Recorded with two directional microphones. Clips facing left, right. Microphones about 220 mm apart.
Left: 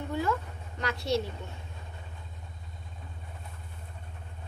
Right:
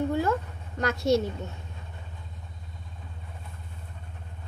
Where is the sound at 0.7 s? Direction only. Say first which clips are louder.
Right 6 dB; 45° right (ahead or behind).